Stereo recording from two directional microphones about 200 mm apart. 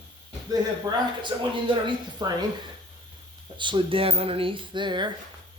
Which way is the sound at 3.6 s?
25° right (ahead or behind).